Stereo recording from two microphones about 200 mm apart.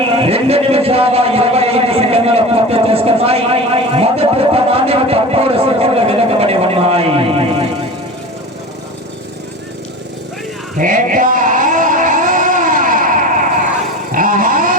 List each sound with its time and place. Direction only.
0.2 s a sound: 30° right (ahead or behind)
10.8 s music: 40° right (ahead or behind)
14.1 s vehicle: 40° right (ahead or behind)